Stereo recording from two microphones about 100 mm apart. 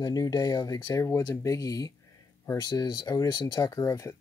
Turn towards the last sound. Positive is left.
turn(degrees=30)  # may be behind; listen again after turning